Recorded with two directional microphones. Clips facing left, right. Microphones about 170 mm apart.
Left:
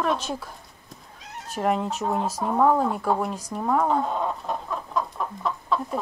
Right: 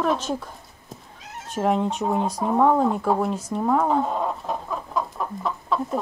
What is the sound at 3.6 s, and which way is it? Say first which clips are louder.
Chicken: right 1 dB; centre (ahead or behind).